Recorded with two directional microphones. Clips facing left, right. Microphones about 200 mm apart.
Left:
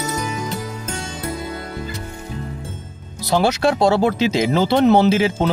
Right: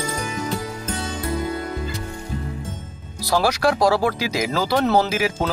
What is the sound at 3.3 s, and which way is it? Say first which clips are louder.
A man's voice: left 2 dB; 25° left (ahead or behind).